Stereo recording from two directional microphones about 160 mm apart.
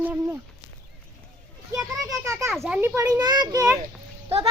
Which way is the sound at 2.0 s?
20° right (ahead or behind).